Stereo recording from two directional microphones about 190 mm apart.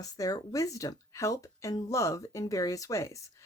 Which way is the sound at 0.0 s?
20° left (ahead or behind).